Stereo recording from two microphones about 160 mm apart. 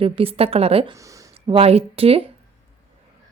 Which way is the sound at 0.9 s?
20° right (ahead or behind).